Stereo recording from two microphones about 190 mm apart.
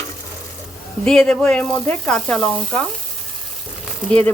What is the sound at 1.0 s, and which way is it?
Sizzle, 5° left (ahead or behind).